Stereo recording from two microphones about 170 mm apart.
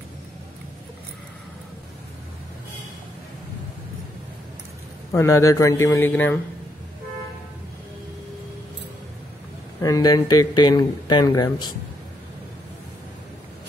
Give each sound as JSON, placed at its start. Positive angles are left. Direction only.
{"t": 5.1, "sound": "a man's voice", "side_deg": 15}
{"t": 9.8, "sound": "speech", "side_deg": 20}